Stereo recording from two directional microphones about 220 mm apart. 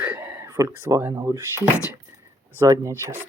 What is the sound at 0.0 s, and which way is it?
Speech, 5° right (ahead or behind).